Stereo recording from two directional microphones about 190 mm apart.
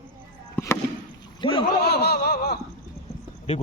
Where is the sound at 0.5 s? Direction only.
15° left (ahead or behind).